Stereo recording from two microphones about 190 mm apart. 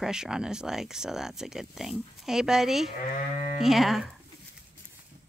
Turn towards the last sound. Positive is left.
turn(degrees=0)  # may be behind; listen again after turning